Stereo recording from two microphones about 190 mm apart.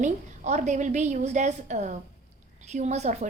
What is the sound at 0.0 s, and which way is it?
A woman's voice, 40° right (ahead or behind).